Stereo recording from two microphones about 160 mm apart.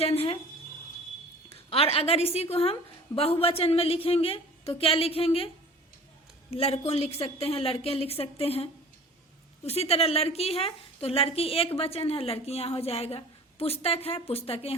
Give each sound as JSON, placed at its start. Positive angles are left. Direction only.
{"t": 0.0, "sound": "a woman's voice", "side_deg": 35}
{"t": 1.5, "sound": "a woman's voice", "side_deg": 35}
{"t": 6.5, "sound": "a woman's voice", "side_deg": 40}